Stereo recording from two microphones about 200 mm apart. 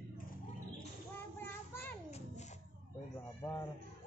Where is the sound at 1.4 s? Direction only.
10° left (ahead or behind).